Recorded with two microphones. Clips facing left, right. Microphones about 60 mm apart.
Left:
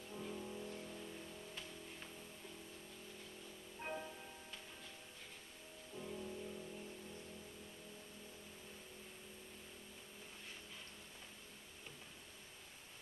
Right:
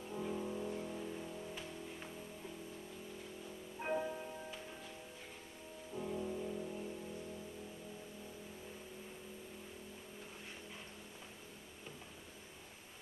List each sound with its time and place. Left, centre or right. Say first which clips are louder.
0.1 s music: right 7 dB; right
3.8 s music: right 8 dB; right
5.9 s music: right 7 dB; right